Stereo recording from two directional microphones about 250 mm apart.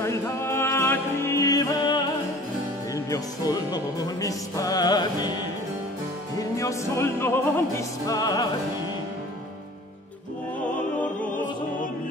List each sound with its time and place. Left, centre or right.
0.0 s music: centre
6.5 s opera: centre